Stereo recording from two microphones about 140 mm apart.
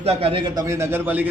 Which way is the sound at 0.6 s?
20° right (ahead or behind).